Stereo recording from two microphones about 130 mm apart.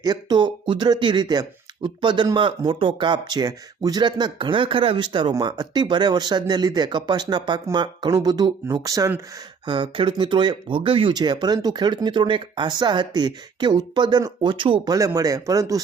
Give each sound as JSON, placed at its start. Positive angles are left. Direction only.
{"t": 0.0, "sound": "speech", "side_deg": -30}
{"t": 9.6, "sound": "speech", "side_deg": -35}
{"t": 14.9, "sound": "speech", "side_deg": -25}